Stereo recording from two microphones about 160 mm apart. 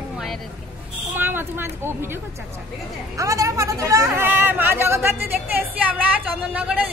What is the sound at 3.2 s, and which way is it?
Speech, 20° right (ahead or behind).